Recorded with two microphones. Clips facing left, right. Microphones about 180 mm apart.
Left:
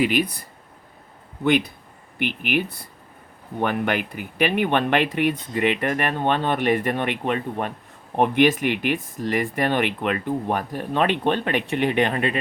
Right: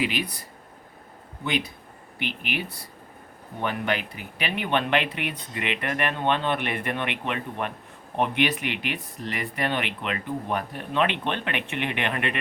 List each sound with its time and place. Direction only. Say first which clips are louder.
0.0 s speech: left 7 dB; 45° left (ahead or behind)
1.5 s speech: left 8 dB; 50° left (ahead or behind); by 12.4 s 35° left (ahead or behind)